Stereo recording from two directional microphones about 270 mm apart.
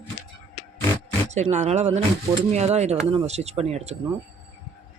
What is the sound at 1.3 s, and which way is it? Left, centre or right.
A man's voice, right.